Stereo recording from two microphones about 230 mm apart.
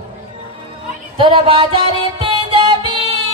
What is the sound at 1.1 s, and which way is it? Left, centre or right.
Music, right.